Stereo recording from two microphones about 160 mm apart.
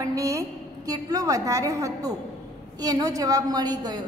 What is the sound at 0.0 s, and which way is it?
A woman's voice, 20° right (ahead or behind).